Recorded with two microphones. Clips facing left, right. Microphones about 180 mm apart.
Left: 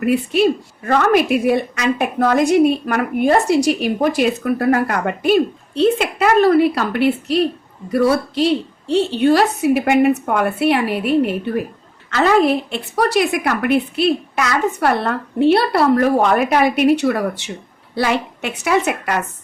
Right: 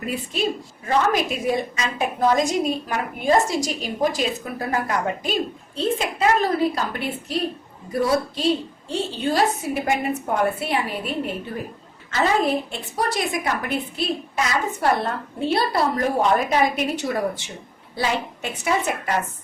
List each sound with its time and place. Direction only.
0.0 s a woman's voice: 65° left (ahead or behind)